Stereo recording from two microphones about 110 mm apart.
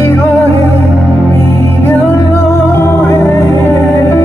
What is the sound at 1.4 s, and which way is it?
Music, 25° left (ahead or behind).